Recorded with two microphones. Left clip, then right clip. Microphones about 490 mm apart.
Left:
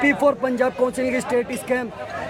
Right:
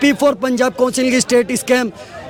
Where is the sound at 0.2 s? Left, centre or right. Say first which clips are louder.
Right 4 dB; right.